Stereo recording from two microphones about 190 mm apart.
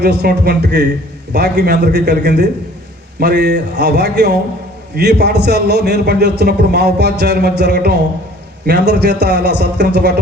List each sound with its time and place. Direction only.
0.0 s a man's voice: 60° right (ahead or behind)